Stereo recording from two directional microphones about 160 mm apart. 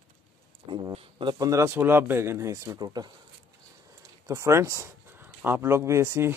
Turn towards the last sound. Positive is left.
turn(degrees=-15)  # may be behind; listen again after turning